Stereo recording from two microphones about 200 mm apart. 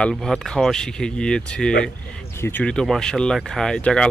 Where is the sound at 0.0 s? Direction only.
Centre (ahead or behind).